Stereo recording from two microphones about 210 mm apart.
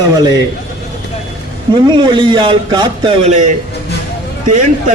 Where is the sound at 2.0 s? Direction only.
25° right (ahead or behind).